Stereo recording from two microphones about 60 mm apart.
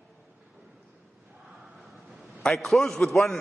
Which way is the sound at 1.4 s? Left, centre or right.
Centre.